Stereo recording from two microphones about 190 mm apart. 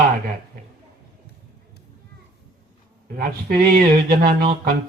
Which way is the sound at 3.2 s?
50° right (ahead or behind).